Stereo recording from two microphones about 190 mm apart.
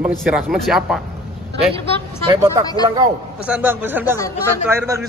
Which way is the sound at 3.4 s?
10° right (ahead or behind).